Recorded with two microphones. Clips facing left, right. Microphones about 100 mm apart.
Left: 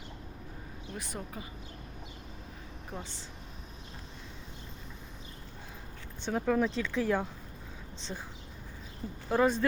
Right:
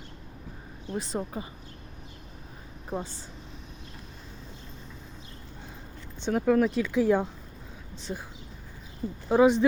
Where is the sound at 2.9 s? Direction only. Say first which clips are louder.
Right 9 dB; 40° right (ahead or behind).